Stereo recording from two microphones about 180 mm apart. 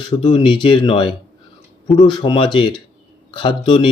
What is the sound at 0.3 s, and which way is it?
Speech, 25° left (ahead or behind).